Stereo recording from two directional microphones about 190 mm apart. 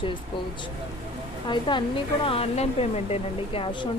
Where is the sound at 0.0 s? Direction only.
25° left (ahead or behind).